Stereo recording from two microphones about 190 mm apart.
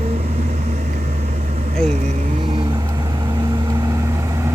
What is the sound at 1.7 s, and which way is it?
Vehicle, 5° left (ahead or behind).